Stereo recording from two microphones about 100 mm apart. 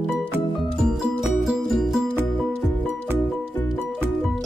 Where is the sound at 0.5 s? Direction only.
5° right (ahead or behind).